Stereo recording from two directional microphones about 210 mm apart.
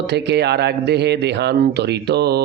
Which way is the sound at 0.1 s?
55° right (ahead or behind).